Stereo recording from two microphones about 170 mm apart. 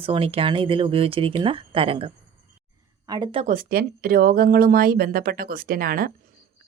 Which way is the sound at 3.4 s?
50° right (ahead or behind).